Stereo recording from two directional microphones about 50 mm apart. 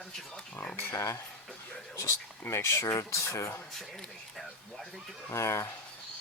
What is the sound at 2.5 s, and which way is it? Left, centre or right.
Speech, left.